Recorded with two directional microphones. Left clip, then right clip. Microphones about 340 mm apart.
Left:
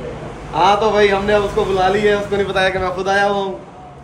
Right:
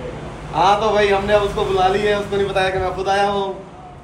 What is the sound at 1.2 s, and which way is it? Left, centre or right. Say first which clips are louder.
Speech: left 1 dB; left.